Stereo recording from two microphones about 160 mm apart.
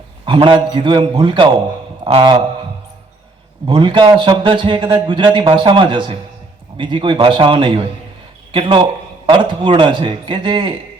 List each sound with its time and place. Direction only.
0.3 s a man's voice: 30° right (ahead or behind)
3.7 s a man's voice: 30° right (ahead or behind)